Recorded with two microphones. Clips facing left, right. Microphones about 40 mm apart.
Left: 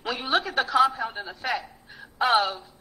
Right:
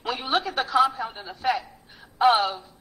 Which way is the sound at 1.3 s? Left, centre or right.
Left.